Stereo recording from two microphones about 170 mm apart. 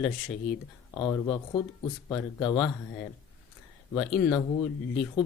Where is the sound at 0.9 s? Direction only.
15° left (ahead or behind).